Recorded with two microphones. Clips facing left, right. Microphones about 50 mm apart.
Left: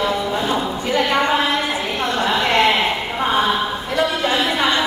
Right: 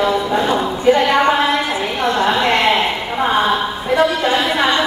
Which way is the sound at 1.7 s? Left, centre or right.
Right.